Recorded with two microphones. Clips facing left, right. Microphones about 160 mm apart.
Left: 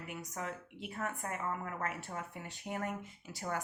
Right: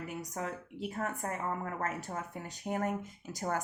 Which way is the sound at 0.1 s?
35° right (ahead or behind).